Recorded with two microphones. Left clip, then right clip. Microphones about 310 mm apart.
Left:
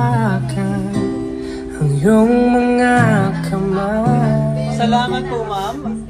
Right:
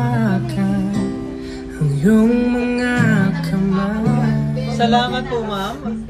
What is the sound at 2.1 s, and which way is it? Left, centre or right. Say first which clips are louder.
Music: left 4 dB; left.